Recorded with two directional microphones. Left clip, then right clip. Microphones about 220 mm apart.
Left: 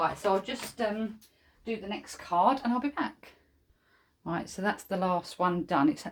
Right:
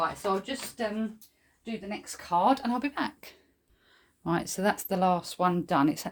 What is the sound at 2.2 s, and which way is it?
Speech, 45° right (ahead or behind).